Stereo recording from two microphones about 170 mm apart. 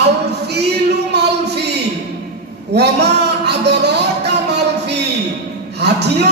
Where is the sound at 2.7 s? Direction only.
80° right.